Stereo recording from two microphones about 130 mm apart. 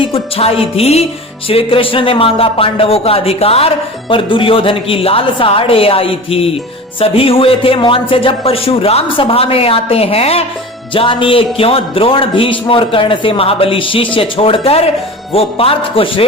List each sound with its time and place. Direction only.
0.0 s speech: 45° left (ahead or behind)